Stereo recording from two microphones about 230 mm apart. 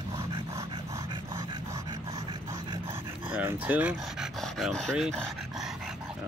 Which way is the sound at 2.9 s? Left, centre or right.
Centre.